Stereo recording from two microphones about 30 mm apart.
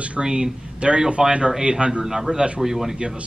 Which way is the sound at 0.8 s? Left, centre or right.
Right.